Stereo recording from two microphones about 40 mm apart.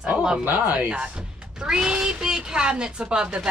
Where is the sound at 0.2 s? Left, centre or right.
Right.